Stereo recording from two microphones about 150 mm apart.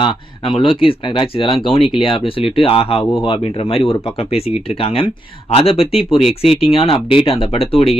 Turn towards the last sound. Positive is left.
turn(degrees=40)  # may be behind; listen again after turning